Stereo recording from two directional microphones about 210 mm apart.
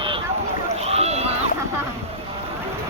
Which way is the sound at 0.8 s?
30° right (ahead or behind).